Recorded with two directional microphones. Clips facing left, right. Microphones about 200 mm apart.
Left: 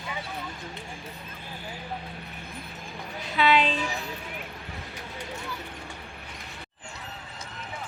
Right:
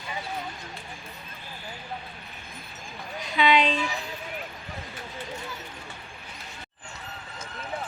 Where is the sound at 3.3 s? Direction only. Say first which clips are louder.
Right 1 dB; 5° left (ahead or behind).